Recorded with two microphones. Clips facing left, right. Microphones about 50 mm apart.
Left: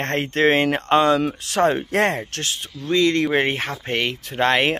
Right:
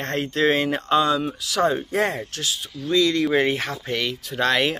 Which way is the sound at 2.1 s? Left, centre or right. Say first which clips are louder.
Left 1 dB; left.